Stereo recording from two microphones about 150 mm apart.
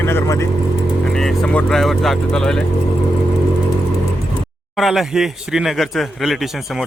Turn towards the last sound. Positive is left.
turn(degrees=0)  # may be behind; listen again after turning